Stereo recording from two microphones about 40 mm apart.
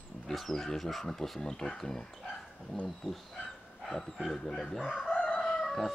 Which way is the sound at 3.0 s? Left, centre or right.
Centre.